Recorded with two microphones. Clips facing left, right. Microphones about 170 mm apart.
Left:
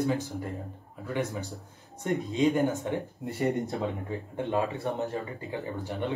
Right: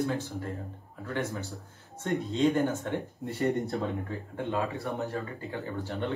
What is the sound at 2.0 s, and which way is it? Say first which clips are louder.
Speech: left 1 dB; 15° left (ahead or behind).